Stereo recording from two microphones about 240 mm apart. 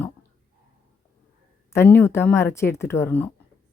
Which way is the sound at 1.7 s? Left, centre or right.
Centre.